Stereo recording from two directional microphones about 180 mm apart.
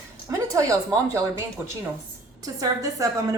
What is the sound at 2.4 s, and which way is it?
Speech, 20° right (ahead or behind).